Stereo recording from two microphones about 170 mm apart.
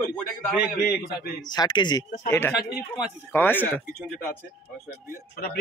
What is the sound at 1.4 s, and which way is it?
Speech, 25° left (ahead or behind).